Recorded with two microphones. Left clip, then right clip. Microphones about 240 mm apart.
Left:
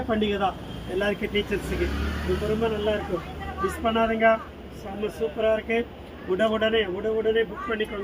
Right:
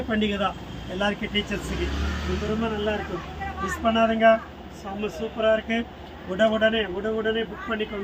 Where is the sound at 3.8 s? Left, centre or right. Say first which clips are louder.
Right 2 dB; right.